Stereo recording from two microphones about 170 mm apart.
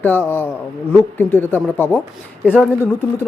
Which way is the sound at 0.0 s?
10° left (ahead or behind).